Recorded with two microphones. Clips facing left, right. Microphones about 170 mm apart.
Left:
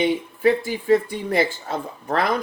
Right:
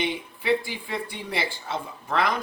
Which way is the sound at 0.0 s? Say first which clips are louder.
Left 9 dB; 45° left (ahead or behind).